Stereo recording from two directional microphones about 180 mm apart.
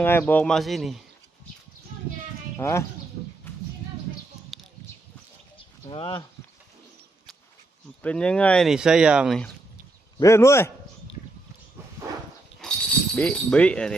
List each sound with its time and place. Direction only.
0.0 s speech: 10° left (ahead or behind)
2.6 s speech: 15° left (ahead or behind)
3.5 s music: 15° left (ahead or behind)
5.9 s speech: 25° left (ahead or behind)
8.0 s speech: 5° left (ahead or behind)
10.2 s speech: 15° left (ahead or behind)
12.6 s pulleys: 5° left (ahead or behind)
13.1 s speech: 5° left (ahead or behind)